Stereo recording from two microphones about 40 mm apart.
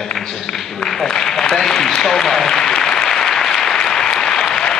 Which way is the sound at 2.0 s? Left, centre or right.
Centre.